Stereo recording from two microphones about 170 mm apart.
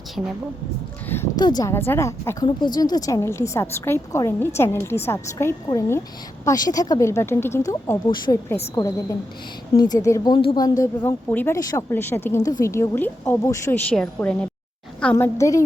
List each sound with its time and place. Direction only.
1.0 s a woman's voice: 15° left (ahead or behind)
15.1 s a woman's voice: 20° left (ahead or behind)